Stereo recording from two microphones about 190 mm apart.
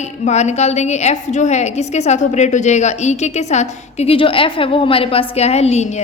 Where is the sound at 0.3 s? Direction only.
35° left (ahead or behind).